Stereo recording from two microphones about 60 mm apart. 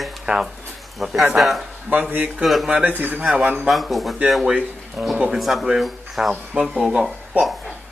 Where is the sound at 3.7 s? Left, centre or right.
Centre.